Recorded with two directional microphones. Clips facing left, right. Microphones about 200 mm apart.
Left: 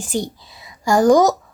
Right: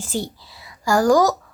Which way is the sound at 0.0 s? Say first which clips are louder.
Left 3 dB; 15° left (ahead or behind).